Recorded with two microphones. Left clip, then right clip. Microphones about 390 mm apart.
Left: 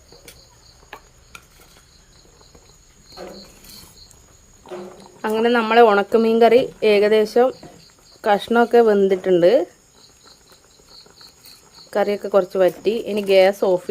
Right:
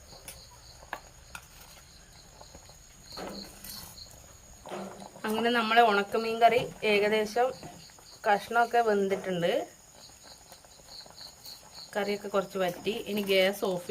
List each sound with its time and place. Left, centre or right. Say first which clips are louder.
5.2 s a woman's voice: left 10 dB; centre
11.9 s a woman's voice: left 12 dB; centre